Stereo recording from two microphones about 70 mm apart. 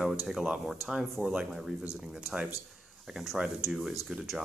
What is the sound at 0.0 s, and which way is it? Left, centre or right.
Speech, centre.